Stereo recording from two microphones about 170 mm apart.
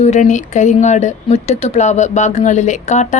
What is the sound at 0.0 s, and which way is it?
Speech, 45° left (ahead or behind).